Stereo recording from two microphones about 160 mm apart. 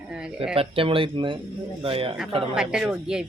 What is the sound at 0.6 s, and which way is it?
Speech, 35° right (ahead or behind).